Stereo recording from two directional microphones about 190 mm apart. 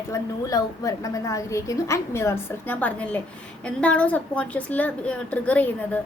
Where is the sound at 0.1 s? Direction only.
20° left (ahead or behind).